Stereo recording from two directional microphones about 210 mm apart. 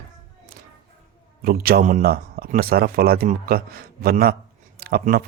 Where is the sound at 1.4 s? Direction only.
45° right (ahead or behind).